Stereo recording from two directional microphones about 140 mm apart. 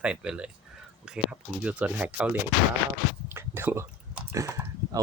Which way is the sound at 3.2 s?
15° right (ahead or behind).